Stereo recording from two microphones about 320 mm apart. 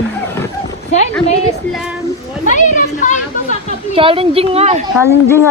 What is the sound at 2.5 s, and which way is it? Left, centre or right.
Children playing, left.